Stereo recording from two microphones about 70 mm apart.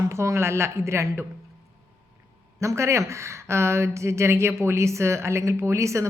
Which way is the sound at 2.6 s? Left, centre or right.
Right.